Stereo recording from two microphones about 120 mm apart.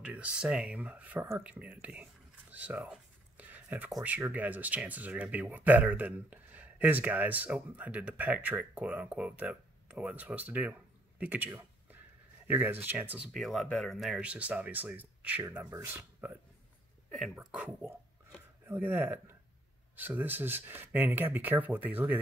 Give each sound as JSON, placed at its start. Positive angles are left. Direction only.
{"t": 0.0, "sound": "speech", "side_deg": -10}
{"t": 3.3, "sound": "a sound", "side_deg": -15}
{"t": 4.0, "sound": "speech", "side_deg": -15}
{"t": 13.3, "sound": "speech", "side_deg": 0}
{"t": 14.3, "sound": "speech", "side_deg": -10}
{"t": 17.1, "sound": "speech", "side_deg": 0}